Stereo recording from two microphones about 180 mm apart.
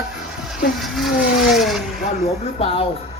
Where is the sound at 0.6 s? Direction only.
Centre (ahead or behind).